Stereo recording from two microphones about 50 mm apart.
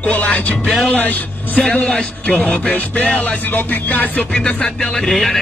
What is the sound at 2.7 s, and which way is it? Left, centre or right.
Music, left.